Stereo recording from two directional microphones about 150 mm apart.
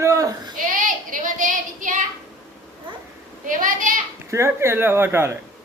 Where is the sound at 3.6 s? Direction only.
65° right (ahead or behind).